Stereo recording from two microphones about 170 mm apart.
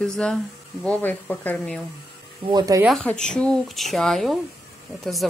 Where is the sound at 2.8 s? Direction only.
5° left (ahead or behind).